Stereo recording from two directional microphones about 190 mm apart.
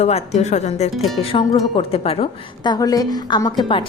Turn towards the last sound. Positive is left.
turn(degrees=25)  # may be behind; listen again after turning